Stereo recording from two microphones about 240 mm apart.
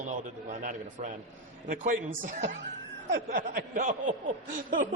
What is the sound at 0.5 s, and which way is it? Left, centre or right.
A man's voice, right.